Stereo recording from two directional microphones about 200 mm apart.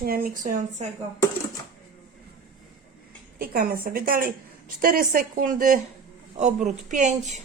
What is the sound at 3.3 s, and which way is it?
A woman's voice, 50° right (ahead or behind).